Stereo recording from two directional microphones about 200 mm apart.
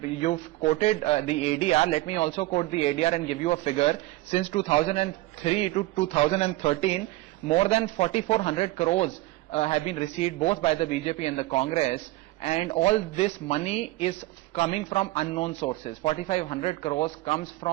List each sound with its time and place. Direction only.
0.2 s speech: 30° left (ahead or behind)